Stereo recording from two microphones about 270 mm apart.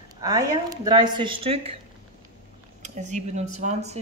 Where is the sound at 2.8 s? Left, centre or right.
Right.